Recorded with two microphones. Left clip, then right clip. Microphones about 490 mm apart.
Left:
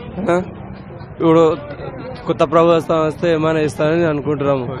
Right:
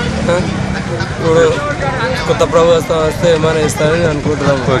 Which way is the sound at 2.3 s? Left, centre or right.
Left.